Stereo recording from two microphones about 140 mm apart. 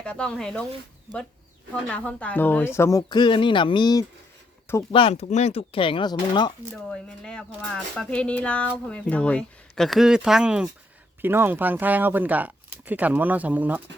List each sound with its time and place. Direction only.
0.0 s speech: 5° left (ahead or behind)
1.9 s speech: 10° left (ahead or behind)
3.1 s speech: 35° left (ahead or behind)
5.2 s speech: 50° left (ahead or behind); by 6.5 s 35° left (ahead or behind)
6.9 s speech: 5° left (ahead or behind); by 13.8 s 10° right (ahead or behind)